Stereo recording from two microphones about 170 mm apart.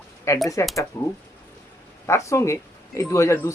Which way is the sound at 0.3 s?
15° left (ahead or behind).